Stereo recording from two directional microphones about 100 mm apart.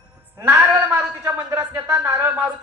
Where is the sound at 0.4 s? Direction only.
30° right (ahead or behind).